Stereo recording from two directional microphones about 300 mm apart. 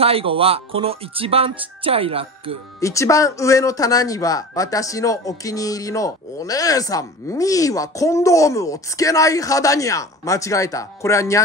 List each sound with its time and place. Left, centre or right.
0.0 s speech: centre
2.8 s speech: centre